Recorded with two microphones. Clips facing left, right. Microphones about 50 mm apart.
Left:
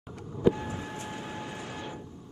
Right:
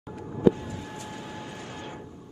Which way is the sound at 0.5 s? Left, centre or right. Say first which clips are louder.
Right 3 dB; left.